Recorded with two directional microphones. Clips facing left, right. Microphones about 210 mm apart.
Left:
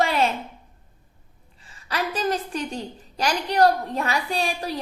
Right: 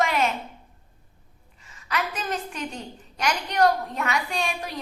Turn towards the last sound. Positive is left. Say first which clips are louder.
# left 3 dB
turn(degrees=35)  # may be behind; listen again after turning